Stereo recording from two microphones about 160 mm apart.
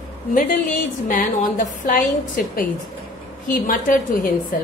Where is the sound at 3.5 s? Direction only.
60° left (ahead or behind).